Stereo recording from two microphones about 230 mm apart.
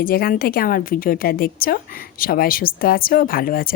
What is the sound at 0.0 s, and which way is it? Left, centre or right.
A woman's voice, left.